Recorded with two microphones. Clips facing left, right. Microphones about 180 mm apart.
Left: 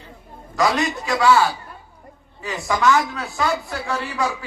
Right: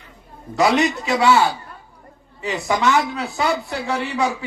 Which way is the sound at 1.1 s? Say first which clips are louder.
Even; 20° right (ahead or behind).